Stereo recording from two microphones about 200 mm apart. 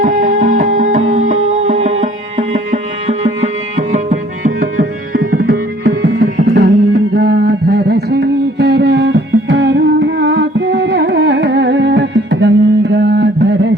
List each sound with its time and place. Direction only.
0.0 s music: 40° right (ahead or behind)
3.9 s tabla: 40° right (ahead or behind); by 13.7 s 60° right (ahead or behind)